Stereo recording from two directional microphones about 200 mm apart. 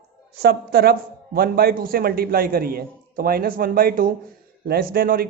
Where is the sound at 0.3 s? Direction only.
50° right (ahead or behind).